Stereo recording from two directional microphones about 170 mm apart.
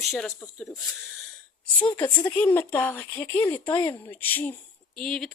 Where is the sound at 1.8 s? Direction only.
10° left (ahead or behind).